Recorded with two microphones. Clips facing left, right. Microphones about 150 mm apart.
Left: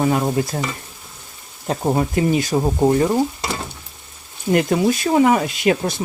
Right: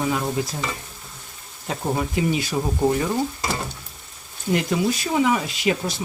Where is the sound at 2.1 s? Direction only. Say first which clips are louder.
Left 5 dB; 45° left (ahead or behind).